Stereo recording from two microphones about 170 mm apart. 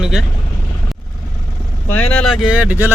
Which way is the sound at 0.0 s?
Centre (ahead or behind).